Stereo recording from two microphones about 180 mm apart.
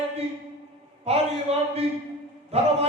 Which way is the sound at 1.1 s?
35° right (ahead or behind).